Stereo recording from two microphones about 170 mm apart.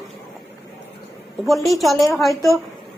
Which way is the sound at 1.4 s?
Centre (ahead or behind).